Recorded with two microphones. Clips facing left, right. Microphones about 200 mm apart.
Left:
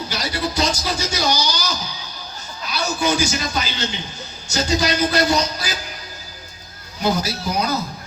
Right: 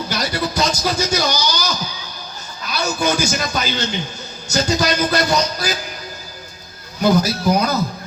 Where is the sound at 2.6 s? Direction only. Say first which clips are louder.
Right 2 dB; 45° right (ahead or behind).